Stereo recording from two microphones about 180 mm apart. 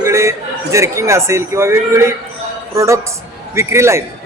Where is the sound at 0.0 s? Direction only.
15° right (ahead or behind).